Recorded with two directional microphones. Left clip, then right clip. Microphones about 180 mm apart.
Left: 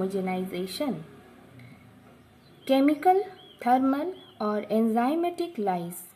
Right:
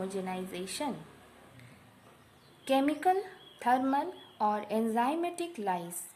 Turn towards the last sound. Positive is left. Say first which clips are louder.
# left 5 dB
turn(degrees=15)  # may be behind; listen again after turning